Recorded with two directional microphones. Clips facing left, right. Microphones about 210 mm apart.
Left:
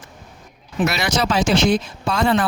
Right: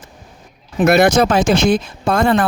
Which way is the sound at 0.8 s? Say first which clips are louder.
Right 9 dB; 55° right (ahead or behind).